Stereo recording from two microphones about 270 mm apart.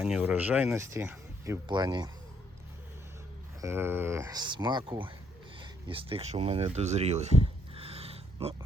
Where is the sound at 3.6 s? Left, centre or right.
Centre.